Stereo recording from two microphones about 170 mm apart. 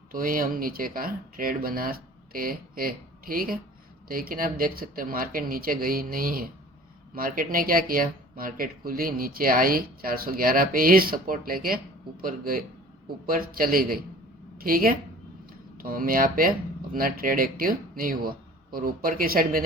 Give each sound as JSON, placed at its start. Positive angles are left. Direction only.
{"t": 0.1, "sound": "speech", "side_deg": -55}